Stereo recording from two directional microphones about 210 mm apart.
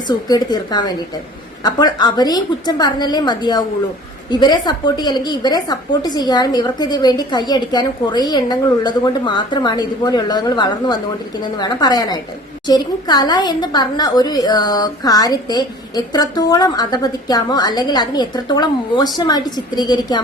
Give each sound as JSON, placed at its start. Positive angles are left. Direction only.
{"t": 0.1, "sound": "a woman's voice", "side_deg": 20}